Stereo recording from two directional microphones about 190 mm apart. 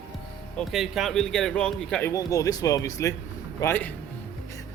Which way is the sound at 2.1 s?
20° left (ahead or behind).